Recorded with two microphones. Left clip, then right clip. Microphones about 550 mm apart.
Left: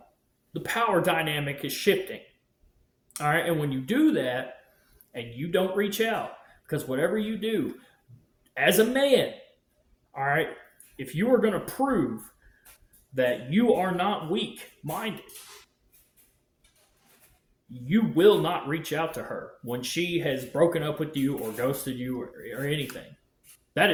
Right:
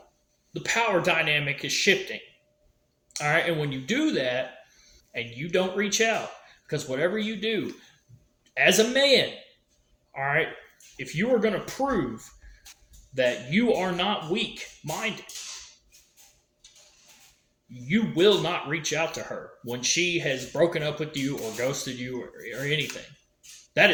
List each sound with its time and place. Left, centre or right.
0.5 s speech: left
13.1 s speech: left
17.8 s speech: left